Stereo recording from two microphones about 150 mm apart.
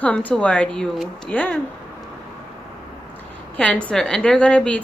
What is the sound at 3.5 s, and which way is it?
A woman's voice, 10° left (ahead or behind).